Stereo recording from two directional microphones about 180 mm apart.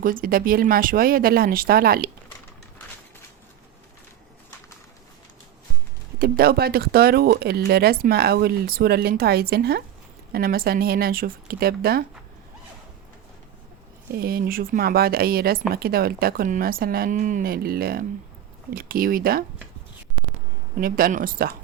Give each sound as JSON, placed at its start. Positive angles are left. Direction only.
{"t": 0.0, "sound": "speech", "side_deg": -50}
{"t": 6.1, "sound": "speech", "side_deg": -55}
{"t": 14.2, "sound": "speech", "side_deg": -55}
{"t": 20.8, "sound": "speech", "side_deg": -55}